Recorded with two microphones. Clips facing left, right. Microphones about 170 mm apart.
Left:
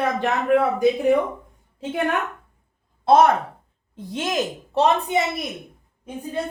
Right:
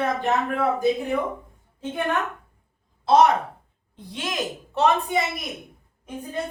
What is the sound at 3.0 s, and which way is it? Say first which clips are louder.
A woman's voice: left 2 dB; 50° left (ahead or behind).